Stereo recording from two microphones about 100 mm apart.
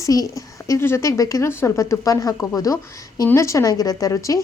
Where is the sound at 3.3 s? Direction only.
30° left (ahead or behind).